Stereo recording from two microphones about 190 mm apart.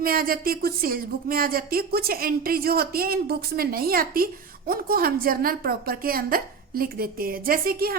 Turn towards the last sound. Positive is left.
turn(degrees=-50)  # may be behind; listen again after turning